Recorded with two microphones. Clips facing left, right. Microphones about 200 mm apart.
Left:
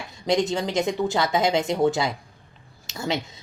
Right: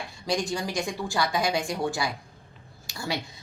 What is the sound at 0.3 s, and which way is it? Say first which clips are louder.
A woman's voice: left 6 dB; 20° left (ahead or behind).